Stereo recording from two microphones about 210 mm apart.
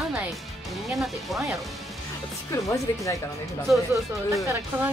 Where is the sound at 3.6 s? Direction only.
15° right (ahead or behind).